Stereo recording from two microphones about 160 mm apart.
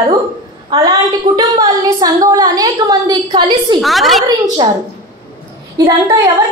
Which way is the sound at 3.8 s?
Centre (ahead or behind).